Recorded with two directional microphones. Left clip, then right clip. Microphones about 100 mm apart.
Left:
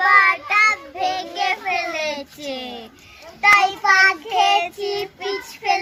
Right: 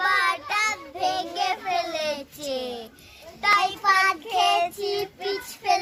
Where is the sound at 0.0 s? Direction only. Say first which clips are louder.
Left 8 dB; 25° right (ahead or behind).